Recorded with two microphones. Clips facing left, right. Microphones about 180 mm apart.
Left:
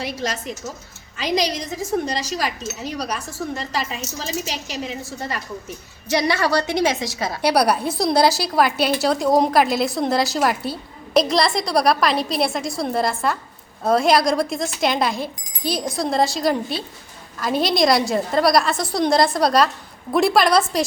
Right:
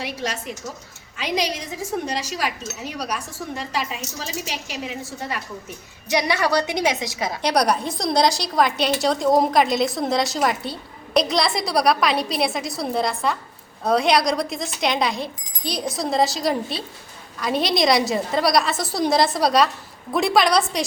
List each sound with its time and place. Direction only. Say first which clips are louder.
0.0 s a woman's voice: left 2 dB; 10° right (ahead or behind)
7.4 s a woman's voice: left 3 dB; 5° left (ahead or behind)